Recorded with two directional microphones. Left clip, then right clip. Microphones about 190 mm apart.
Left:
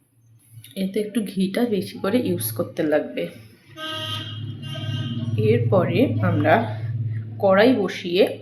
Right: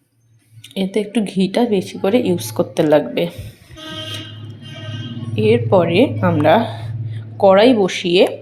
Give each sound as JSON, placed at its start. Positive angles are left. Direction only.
{"t": 0.7, "sound": "speech", "side_deg": -20}
{"t": 5.4, "sound": "speech", "side_deg": -25}